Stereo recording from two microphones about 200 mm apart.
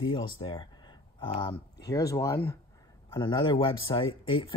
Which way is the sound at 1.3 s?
25° left (ahead or behind).